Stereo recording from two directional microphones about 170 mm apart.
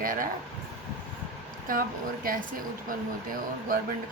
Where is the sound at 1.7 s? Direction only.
55° right (ahead or behind).